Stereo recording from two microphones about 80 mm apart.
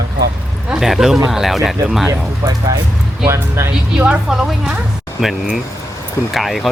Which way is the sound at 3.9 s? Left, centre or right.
Centre.